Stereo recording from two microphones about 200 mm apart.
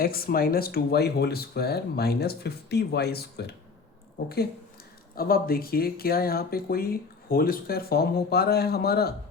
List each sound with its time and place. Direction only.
0.0 s speech: 50° left (ahead or behind)
5.1 s speech: 50° left (ahead or behind)